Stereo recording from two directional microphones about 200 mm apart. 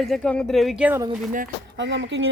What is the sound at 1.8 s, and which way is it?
Speech, 65° right (ahead or behind).